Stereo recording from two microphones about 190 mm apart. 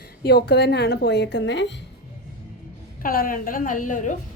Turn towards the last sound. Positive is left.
turn(degrees=40)  # may be behind; listen again after turning